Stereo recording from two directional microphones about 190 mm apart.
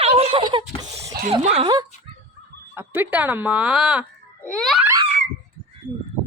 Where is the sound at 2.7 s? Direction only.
10° right (ahead or behind).